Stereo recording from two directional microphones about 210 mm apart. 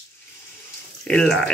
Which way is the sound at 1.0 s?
5° left (ahead or behind).